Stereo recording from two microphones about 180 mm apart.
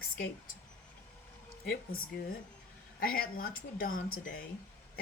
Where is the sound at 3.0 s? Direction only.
55° left (ahead or behind).